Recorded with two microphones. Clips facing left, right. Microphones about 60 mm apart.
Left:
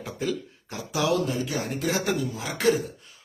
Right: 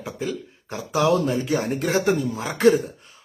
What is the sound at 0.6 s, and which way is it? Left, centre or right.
Speech, right.